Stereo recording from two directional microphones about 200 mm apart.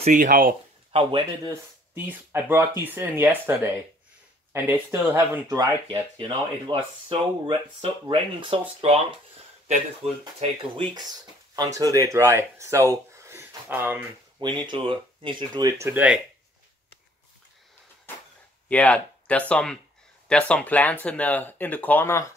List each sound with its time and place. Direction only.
0.0 s speech: 40° right (ahead or behind)
0.9 s speech: 30° right (ahead or behind)
2.0 s speech: 10° right (ahead or behind); by 9.2 s 30° right (ahead or behind)
11.5 s speech: 20° right (ahead or behind)
14.4 s speech: 25° right (ahead or behind); by 16.2 s 10° right (ahead or behind)
18.7 s speech: 5° left (ahead or behind)